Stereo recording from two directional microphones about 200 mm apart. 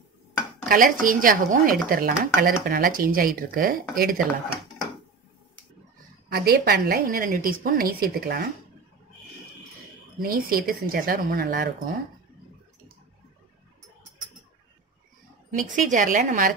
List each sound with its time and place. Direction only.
0.7 s a woman's voice: 45° right (ahead or behind)
6.2 s a woman's voice: 50° right (ahead or behind)
10.2 s a woman's voice: 45° right (ahead or behind)
15.5 s a woman's voice: 40° right (ahead or behind)